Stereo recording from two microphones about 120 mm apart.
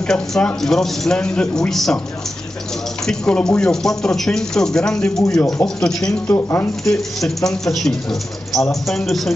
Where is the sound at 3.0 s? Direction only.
5° left (ahead or behind).